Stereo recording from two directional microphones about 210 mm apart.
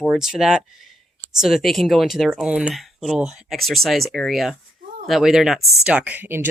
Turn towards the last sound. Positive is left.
turn(degrees=-10)  # may be behind; listen again after turning